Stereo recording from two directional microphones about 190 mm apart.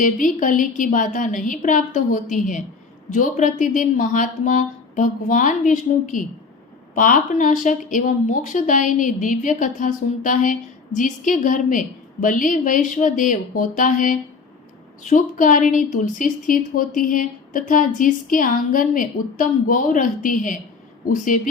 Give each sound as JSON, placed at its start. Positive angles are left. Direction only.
{"t": 0.0, "sound": "a woman's voice", "side_deg": 45}